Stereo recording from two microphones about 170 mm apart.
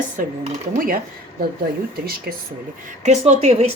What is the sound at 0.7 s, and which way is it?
Speech, 60° right (ahead or behind).